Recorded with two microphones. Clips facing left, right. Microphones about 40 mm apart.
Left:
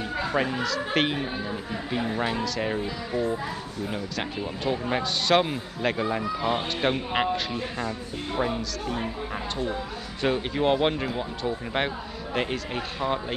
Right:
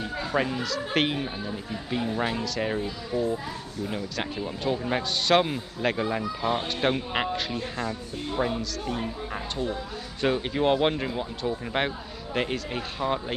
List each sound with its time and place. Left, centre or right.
0.2 s a man's voice: centre
3.1 s speech: left
4.5 s a man's voice: centre